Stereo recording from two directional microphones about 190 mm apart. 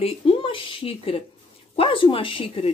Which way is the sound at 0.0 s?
25° left (ahead or behind).